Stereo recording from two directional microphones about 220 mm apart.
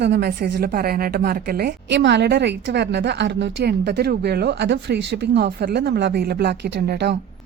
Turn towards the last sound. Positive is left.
turn(degrees=-50)  # may be behind; listen again after turning